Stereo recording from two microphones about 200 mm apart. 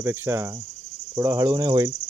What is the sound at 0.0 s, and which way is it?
Cricket, 15° right (ahead or behind).